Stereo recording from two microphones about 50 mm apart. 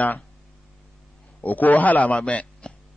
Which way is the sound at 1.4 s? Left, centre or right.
Left.